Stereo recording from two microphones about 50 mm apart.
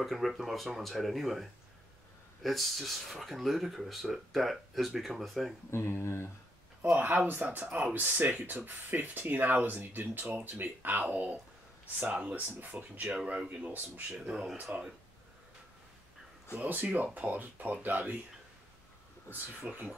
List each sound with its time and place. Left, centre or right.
0.0 s speech: centre
5.7 s speech: left
7.0 s speech: right
13.1 s speech: centre
14.3 s speech: centre
16.6 s speech: right
19.6 s speech: right